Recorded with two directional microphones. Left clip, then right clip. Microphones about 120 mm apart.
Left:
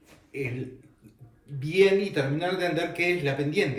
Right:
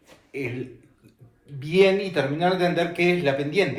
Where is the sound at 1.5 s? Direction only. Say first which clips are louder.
Right 2 dB; 40° right (ahead or behind).